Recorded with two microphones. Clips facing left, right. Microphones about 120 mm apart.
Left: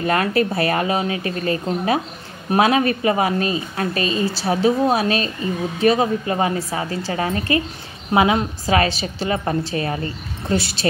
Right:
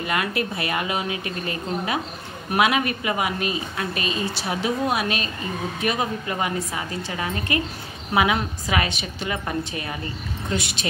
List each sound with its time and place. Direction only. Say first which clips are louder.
0.0 s a woman's voice: left 6 dB; 40° left (ahead or behind)